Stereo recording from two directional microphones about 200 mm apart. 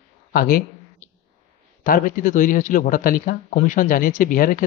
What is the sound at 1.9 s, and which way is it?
Speech, 40° left (ahead or behind).